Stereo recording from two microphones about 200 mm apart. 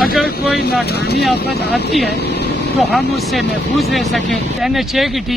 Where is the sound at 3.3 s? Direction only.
Centre (ahead or behind).